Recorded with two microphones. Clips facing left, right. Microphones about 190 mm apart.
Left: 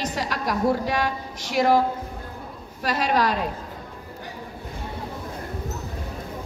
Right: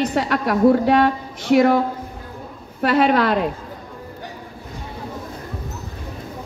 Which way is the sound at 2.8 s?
60° right (ahead or behind).